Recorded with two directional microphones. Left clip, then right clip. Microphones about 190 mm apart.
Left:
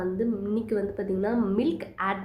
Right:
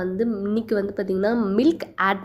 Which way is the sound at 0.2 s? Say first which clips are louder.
Right 4 dB; 35° right (ahead or behind).